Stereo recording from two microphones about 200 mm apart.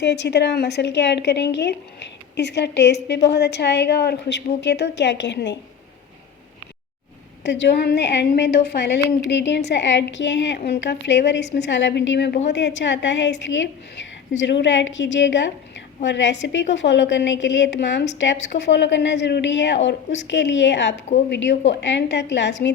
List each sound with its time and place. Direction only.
0.0 s a woman's voice: 60° left (ahead or behind)
7.4 s a woman's voice: 60° left (ahead or behind)